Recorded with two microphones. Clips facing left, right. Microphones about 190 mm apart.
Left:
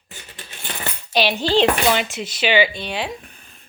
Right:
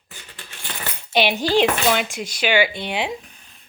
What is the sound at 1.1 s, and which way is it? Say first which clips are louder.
Speech: even; 15° right (ahead or behind).